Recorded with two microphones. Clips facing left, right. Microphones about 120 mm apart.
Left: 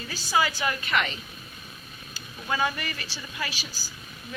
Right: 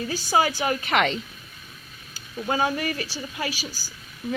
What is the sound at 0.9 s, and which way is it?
Speech, 85° right.